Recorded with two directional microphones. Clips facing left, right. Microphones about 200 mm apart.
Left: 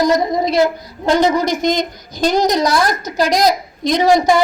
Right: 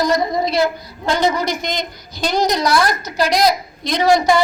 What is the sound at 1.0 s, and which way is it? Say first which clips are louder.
A woman's voice: left 4 dB; 45° left (ahead or behind).